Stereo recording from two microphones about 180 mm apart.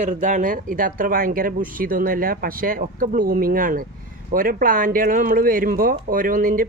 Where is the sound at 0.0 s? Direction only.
45° right (ahead or behind).